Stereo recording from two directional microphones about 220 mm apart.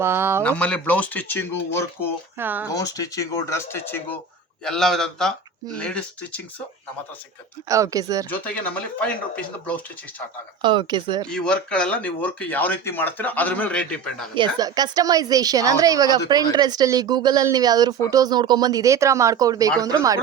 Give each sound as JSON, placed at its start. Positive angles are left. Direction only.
{"t": 0.0, "sound": "speech", "side_deg": -10}
{"t": 0.4, "sound": "speech", "side_deg": 5}
{"t": 2.4, "sound": "speech", "side_deg": -10}
{"t": 2.6, "sound": "a man's voice", "side_deg": 15}
{"t": 7.7, "sound": "speech", "side_deg": -15}
{"t": 8.3, "sound": "speech", "side_deg": 5}
{"t": 10.6, "sound": "speech", "side_deg": -20}
{"t": 11.3, "sound": "speech", "side_deg": 5}
{"t": 14.3, "sound": "speech", "side_deg": -20}